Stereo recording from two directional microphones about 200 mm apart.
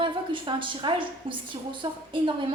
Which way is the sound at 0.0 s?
25° right (ahead or behind).